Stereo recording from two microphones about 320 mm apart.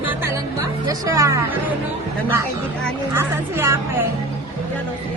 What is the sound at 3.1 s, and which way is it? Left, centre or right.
Speech, centre.